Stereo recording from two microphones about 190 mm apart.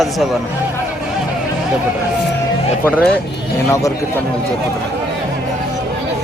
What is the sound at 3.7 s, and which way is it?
Speech, 15° left (ahead or behind).